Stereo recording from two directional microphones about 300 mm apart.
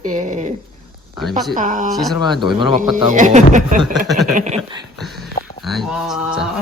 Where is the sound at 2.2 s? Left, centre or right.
Centre.